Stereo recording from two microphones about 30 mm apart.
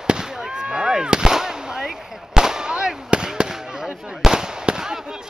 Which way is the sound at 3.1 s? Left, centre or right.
Right.